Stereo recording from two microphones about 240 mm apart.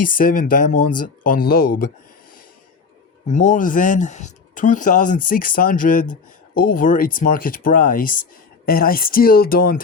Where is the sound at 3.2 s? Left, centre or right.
Left.